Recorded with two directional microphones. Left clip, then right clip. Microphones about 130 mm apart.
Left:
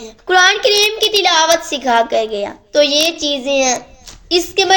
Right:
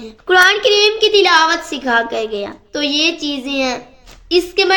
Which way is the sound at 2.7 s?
35° left (ahead or behind).